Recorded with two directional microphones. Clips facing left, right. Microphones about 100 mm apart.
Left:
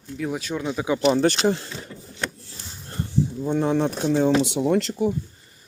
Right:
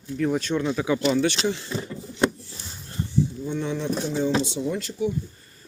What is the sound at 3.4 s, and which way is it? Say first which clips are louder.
Speech: left 5 dB; 45° left (ahead or behind).